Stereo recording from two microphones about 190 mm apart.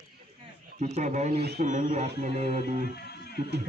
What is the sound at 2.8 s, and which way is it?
Music, 55° left (ahead or behind).